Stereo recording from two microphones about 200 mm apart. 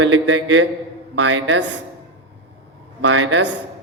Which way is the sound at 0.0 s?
70° right (ahead or behind).